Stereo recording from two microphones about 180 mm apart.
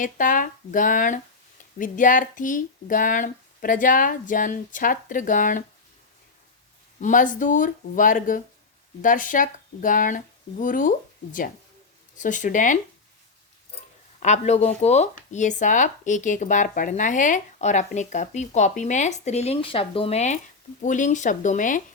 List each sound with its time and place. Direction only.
0.0 s speech: 45° left (ahead or behind)
7.0 s speech: 45° left (ahead or behind)
14.2 s speech: 40° left (ahead or behind)